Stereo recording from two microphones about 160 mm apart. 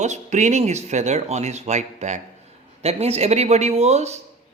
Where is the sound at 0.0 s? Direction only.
45° right (ahead or behind).